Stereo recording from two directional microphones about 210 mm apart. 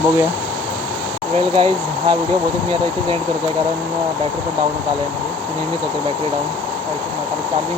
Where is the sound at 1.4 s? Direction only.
25° right (ahead or behind).